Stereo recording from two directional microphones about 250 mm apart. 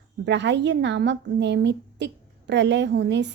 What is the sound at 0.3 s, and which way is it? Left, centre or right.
A woman's voice, right.